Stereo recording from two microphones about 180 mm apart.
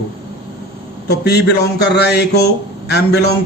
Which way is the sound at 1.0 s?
65° left (ahead or behind).